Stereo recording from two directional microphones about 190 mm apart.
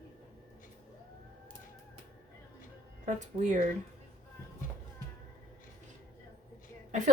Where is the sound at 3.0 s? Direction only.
40° right (ahead or behind).